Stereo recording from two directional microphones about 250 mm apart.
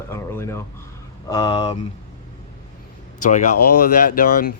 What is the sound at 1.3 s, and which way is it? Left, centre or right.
Speech, centre.